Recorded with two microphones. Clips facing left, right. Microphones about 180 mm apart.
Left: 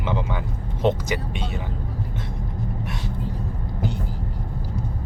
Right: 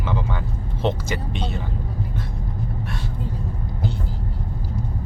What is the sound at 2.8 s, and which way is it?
Vehicle, 20° left (ahead or behind).